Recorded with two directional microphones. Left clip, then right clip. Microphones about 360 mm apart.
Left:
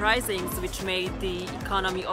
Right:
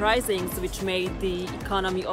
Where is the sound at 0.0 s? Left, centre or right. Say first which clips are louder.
Right 1 dB; centre.